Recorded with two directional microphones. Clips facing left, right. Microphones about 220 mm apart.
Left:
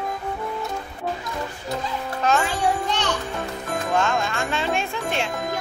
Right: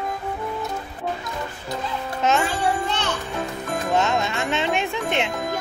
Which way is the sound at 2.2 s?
20° right (ahead or behind).